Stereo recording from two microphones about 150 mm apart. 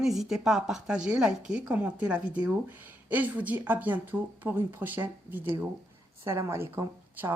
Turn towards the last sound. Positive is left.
turn(degrees=-15)  # may be behind; listen again after turning